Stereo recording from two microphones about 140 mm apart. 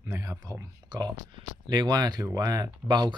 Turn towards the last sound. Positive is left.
turn(degrees=-30)  # may be behind; listen again after turning